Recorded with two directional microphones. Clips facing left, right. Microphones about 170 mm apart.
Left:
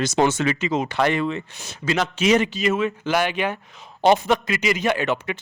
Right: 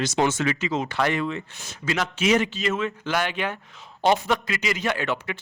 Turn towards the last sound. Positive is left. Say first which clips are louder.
# left 4 dB
turn(degrees=20)  # may be behind; listen again after turning